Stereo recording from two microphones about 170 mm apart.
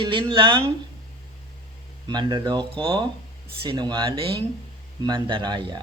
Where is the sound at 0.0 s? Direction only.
30° right (ahead or behind).